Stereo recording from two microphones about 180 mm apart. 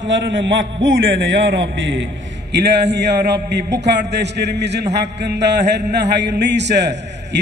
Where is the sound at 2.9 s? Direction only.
70° right (ahead or behind).